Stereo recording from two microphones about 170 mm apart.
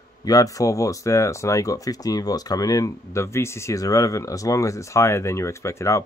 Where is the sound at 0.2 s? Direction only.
20° left (ahead or behind).